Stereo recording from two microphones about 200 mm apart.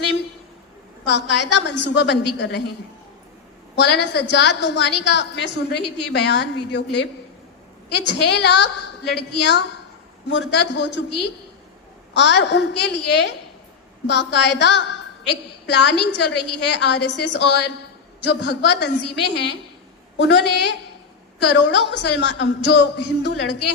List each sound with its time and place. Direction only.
1.0 s a woman's voice: 60° left (ahead or behind)
3.8 s a woman's voice: 60° left (ahead or behind)